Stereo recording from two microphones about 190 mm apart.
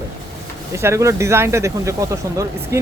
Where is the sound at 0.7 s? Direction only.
15° right (ahead or behind).